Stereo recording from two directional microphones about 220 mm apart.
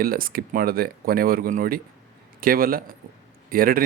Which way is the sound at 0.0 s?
40° right (ahead or behind).